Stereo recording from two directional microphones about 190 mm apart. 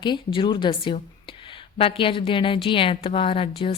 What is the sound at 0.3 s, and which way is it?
A woman's voice, 25° left (ahead or behind).